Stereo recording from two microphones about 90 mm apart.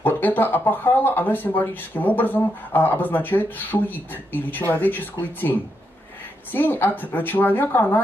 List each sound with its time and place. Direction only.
0.0 s speech: 20° left (ahead or behind)